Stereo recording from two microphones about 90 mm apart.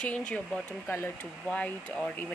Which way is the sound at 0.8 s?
25° left (ahead or behind).